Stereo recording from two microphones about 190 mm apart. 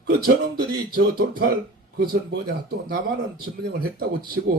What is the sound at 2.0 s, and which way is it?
A man's voice, 60° right (ahead or behind).